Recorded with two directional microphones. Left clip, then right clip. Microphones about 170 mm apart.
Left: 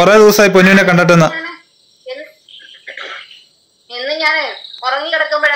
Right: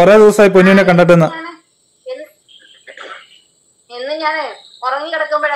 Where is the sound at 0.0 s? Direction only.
Centre (ahead or behind).